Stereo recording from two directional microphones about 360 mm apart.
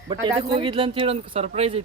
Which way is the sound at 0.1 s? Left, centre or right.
Centre.